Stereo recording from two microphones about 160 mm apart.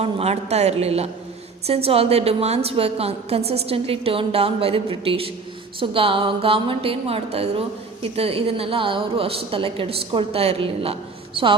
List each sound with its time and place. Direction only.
0.0 s a woman's voice: 40° right (ahead or behind)